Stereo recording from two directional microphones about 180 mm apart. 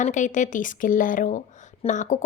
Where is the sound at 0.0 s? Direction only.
45° left (ahead or behind).